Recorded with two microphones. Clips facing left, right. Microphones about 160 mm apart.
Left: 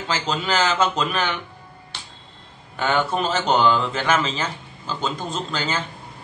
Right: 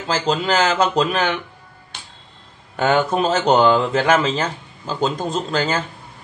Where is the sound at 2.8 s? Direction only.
40° right (ahead or behind).